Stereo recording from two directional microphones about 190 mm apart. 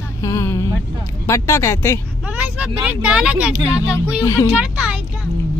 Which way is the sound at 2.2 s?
5° right (ahead or behind).